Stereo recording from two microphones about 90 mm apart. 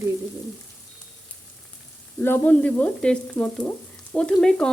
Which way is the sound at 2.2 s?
20° left (ahead or behind).